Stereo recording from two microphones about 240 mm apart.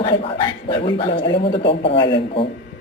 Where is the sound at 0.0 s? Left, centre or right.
Left.